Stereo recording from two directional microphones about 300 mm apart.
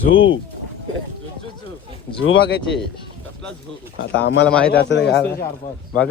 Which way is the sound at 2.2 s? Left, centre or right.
Left.